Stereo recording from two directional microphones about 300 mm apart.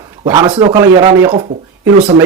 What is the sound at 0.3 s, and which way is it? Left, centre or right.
Speech, centre.